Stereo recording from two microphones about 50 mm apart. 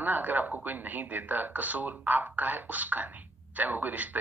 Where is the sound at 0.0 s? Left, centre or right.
Right.